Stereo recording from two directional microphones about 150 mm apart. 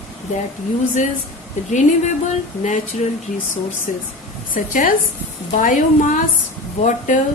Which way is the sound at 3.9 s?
55° left (ahead or behind).